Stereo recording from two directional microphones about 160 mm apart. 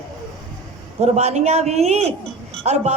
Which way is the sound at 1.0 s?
45° right (ahead or behind).